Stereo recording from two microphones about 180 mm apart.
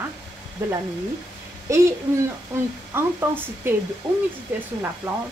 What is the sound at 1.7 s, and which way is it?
Speech, 15° right (ahead or behind).